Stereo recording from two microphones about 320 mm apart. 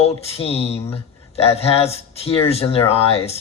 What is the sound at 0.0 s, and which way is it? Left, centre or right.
Speech, centre.